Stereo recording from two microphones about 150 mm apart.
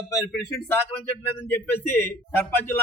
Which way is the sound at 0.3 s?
10° left (ahead or behind).